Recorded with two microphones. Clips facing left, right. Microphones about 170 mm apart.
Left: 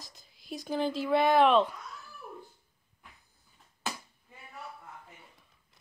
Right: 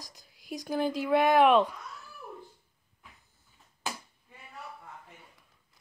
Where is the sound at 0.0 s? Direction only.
15° right (ahead or behind).